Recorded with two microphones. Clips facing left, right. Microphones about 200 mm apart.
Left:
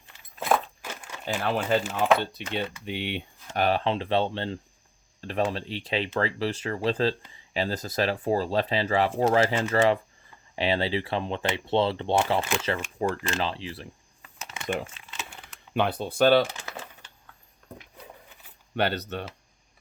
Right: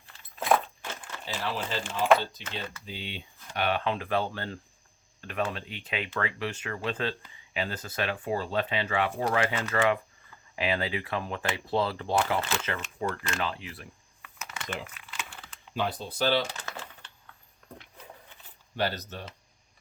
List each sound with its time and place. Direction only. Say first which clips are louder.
0.3 s a sound: even; 5° left (ahead or behind)
1.2 s speech: left 6 dB; 50° left (ahead or behind)
1.8 s speech: even; 5° left (ahead or behind)
2.4 s speech: left 7 dB; 65° left (ahead or behind)
3.5 s speech: left 4 dB; 35° left (ahead or behind)
13.2 s a sound: left 3 dB; 30° left (ahead or behind)
14.8 s crumpling: even; 25° left (ahead or behind)
15.7 s speech: left 5 dB; 60° left (ahead or behind)
18.8 s speech: left 4 dB; 65° left (ahead or behind)